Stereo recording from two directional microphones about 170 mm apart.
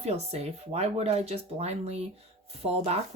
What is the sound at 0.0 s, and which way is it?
Speech, 40° right (ahead or behind).